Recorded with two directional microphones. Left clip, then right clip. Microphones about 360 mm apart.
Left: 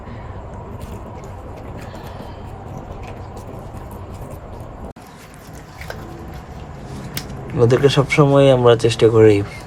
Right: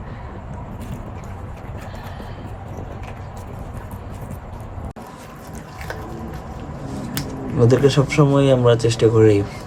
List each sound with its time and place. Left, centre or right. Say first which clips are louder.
7.6 s speech: left 2 dB; centre